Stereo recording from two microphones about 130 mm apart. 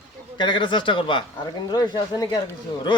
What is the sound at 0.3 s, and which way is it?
Speech, 40° left (ahead or behind).